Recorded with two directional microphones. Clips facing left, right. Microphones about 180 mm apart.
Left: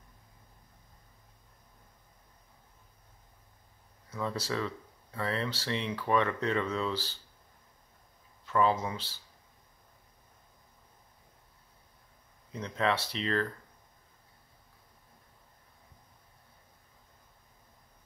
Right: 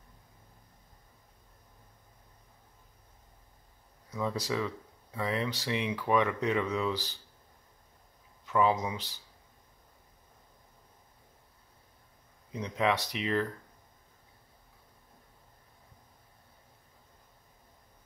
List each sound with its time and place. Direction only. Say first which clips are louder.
4.1 s speech: right 2 dB; 15° right (ahead or behind)
8.5 s speech: right 1 dB; 15° right (ahead or behind)
12.5 s speech: right 1 dB; 15° right (ahead or behind)